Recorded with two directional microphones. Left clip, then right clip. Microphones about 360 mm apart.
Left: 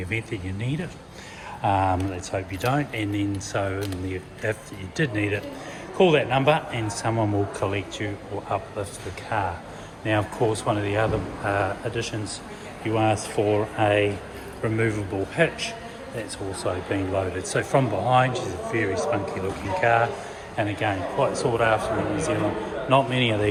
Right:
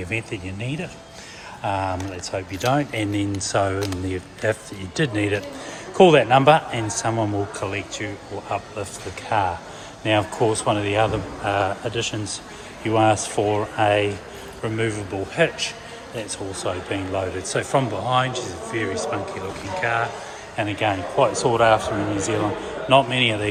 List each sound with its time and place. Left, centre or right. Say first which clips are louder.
0.1 s speech: right 2 dB; centre